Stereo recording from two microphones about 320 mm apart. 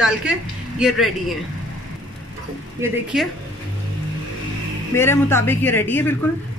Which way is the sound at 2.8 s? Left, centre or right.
Centre.